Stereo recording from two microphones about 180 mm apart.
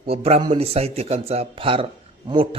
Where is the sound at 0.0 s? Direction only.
30° right (ahead or behind).